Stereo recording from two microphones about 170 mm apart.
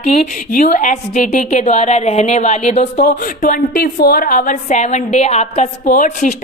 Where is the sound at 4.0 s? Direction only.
60° left (ahead or behind).